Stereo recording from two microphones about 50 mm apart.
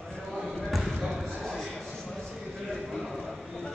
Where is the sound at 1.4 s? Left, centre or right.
Centre.